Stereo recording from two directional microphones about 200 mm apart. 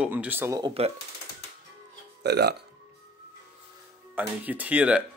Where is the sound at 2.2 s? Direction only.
55° right (ahead or behind).